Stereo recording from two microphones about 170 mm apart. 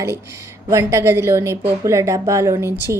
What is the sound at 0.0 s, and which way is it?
A woman's voice, 15° right (ahead or behind).